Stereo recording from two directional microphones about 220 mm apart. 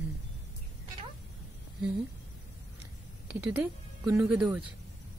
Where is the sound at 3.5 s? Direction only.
10° right (ahead or behind).